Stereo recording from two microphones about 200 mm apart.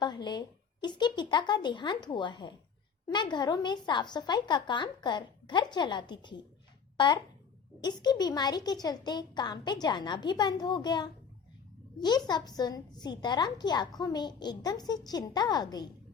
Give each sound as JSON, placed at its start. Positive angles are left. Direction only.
{"t": 0.0, "sound": "a woman's voice", "side_deg": 20}